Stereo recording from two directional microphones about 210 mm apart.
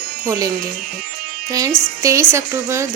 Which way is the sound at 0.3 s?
15° right (ahead or behind).